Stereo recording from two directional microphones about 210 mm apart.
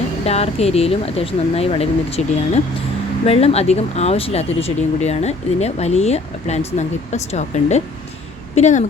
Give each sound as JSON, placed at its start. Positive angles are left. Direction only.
{"t": 0.3, "sound": "speech", "side_deg": 30}